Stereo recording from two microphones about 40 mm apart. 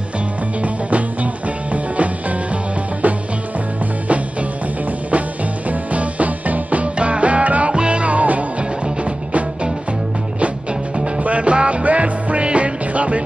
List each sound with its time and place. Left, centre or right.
0.6 s music: right
5.1 s music: right